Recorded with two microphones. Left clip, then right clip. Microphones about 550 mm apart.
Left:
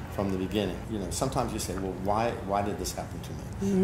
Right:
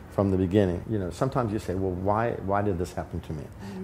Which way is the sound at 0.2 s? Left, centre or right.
Right.